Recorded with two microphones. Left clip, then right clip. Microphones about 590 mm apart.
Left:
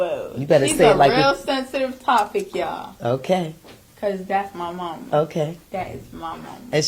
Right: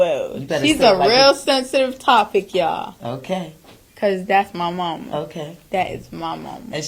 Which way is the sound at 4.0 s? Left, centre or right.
Right.